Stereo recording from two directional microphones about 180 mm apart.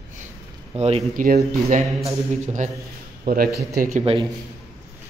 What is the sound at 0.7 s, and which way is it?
Speech, 35° right (ahead or behind).